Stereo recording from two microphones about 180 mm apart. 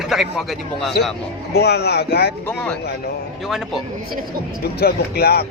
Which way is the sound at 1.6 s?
65° left (ahead or behind).